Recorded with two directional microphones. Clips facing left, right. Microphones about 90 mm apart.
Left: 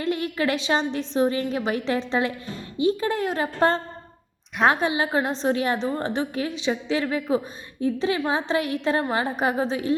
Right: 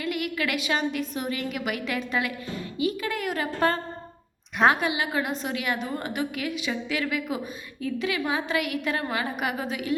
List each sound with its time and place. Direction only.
0.0 s a woman's voice: 30° left (ahead or behind)
4.5 s a woman's voice: centre (ahead or behind)
4.8 s a woman's voice: 30° left (ahead or behind)